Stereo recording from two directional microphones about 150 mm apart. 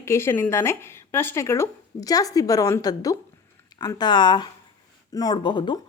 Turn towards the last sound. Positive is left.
turn(degrees=30)  # may be behind; listen again after turning